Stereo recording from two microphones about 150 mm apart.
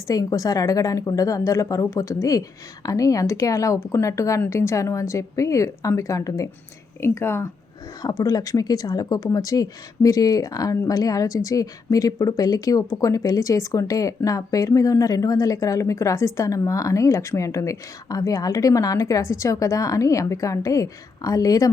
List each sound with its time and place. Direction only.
0.1 s speech: 25° left (ahead or behind)